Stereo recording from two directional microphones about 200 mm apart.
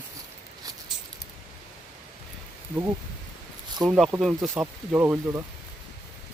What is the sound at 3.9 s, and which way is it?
Speech, 5° right (ahead or behind).